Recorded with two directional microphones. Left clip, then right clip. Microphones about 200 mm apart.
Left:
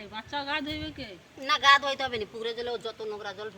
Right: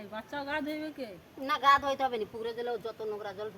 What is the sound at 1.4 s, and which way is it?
Speech, 20° right (ahead or behind).